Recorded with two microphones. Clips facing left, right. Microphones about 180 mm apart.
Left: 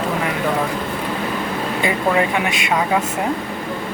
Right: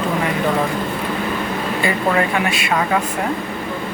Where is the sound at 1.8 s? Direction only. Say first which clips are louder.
Even; 15° left (ahead or behind).